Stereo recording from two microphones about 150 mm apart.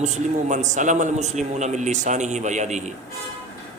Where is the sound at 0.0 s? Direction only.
50° right (ahead or behind).